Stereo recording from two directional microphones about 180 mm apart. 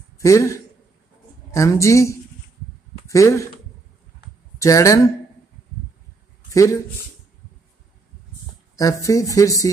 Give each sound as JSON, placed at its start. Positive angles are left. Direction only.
{"t": 0.2, "sound": "speech", "side_deg": 15}
{"t": 4.6, "sound": "speech", "side_deg": 20}
{"t": 6.5, "sound": "speech", "side_deg": 15}
{"t": 8.7, "sound": "speech", "side_deg": 20}